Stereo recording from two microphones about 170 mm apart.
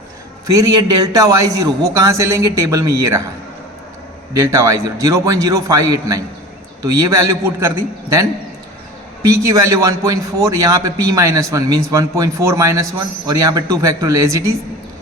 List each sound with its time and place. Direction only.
0.5 s a man's voice: 25° right (ahead or behind)
4.4 s a man's voice: 15° right (ahead or behind)